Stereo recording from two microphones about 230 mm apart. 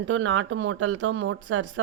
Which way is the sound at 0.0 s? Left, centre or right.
Right.